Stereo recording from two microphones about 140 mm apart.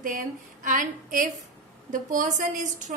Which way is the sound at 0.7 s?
70° right (ahead or behind).